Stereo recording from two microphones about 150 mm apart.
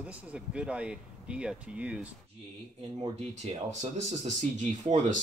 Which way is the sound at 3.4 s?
50° right (ahead or behind).